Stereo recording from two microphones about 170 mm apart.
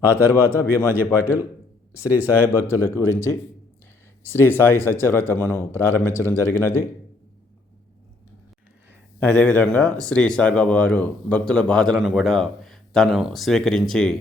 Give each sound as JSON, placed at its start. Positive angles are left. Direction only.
{"t": 0.3, "sound": "speech", "side_deg": 15}
{"t": 3.0, "sound": "speech", "side_deg": -20}
{"t": 4.3, "sound": "speech", "side_deg": 15}
{"t": 9.2, "sound": "speech", "side_deg": 10}